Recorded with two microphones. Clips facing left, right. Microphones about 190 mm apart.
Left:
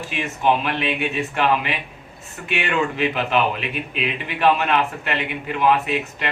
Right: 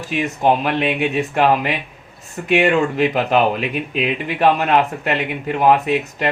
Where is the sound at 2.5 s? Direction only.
40° right (ahead or behind).